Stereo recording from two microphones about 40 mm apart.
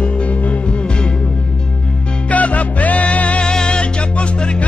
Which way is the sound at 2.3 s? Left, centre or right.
Left.